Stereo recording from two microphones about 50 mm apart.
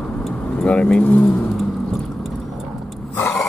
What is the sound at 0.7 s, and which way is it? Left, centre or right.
Speech, left.